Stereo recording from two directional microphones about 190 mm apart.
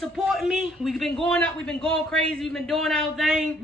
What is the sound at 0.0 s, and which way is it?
A man's voice, centre (ahead or behind).